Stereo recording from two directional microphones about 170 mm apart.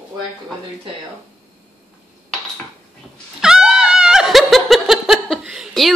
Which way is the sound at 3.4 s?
5° right (ahead or behind).